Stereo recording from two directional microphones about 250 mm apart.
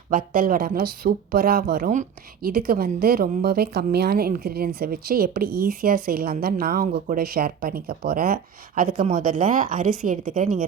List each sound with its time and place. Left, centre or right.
0.1 s speech: right